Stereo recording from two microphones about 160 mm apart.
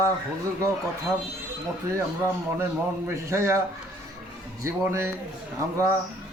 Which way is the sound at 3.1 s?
15° right (ahead or behind).